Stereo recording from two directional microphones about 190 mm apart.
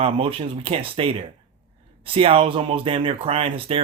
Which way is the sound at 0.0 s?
30° right (ahead or behind).